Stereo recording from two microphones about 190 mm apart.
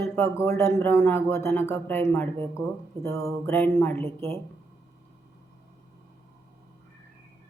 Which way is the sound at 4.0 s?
30° right (ahead or behind).